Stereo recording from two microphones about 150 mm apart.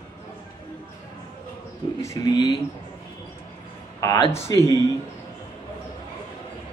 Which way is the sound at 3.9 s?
20° left (ahead or behind).